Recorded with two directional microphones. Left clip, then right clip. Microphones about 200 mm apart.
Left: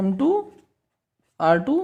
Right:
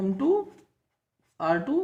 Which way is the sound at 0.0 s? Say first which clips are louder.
Left 3 dB; 50° left (ahead or behind).